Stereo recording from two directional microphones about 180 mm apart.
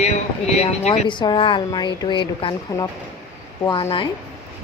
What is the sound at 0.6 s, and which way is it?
Speech, 35° left (ahead or behind).